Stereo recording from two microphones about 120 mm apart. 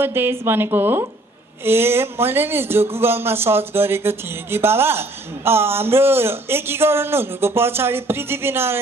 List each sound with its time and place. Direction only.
0.0 s speech: 20° right (ahead or behind)